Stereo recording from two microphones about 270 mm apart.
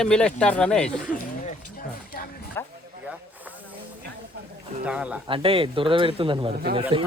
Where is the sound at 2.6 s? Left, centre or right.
Centre.